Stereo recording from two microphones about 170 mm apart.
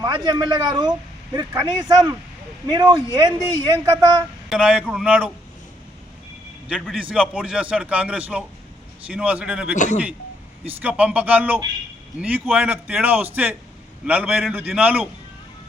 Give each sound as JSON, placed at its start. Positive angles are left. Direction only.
{"t": 0.0, "sound": "a man's voice", "side_deg": -25}
{"t": 4.4, "sound": "a man's voice", "side_deg": -5}
{"t": 6.7, "sound": "a man's voice", "side_deg": 0}
{"t": 9.7, "sound": "a man's voice", "side_deg": 45}
{"t": 10.8, "sound": "a man's voice", "side_deg": -10}